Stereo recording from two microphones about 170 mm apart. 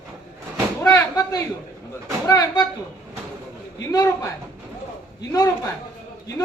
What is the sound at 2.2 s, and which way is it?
Speech, 20° left (ahead or behind).